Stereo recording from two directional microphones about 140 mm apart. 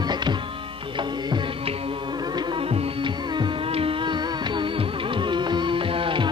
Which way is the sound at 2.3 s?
40° right (ahead or behind).